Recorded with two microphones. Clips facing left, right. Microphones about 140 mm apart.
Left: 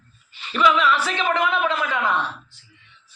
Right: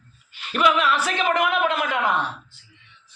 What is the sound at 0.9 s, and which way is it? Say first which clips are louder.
Speech: even; 10° right (ahead or behind).